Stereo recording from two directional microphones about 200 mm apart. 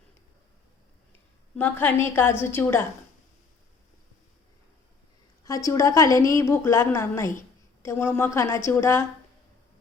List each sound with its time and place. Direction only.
1.5 s a woman's voice: 10° left (ahead or behind)
5.5 s a woman's voice: 15° left (ahead or behind)